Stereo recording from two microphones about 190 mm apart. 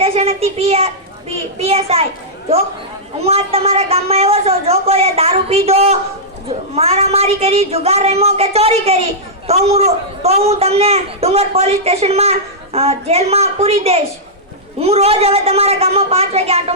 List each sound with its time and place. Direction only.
0.0 s a woman's voice: 30° right (ahead or behind)
3.2 s a woman's voice: 30° right (ahead or behind)